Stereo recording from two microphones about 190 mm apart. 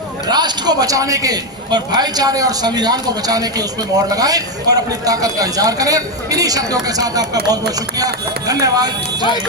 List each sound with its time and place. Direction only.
0.3 s a man's voice: 20° right (ahead or behind)